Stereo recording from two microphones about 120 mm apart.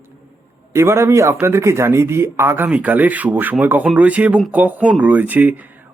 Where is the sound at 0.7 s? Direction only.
25° right (ahead or behind).